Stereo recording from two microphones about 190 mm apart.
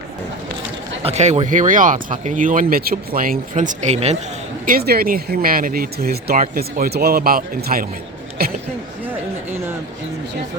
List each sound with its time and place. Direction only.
1.0 s speech: 35° right (ahead or behind)
4.6 s speech: 50° right (ahead or behind)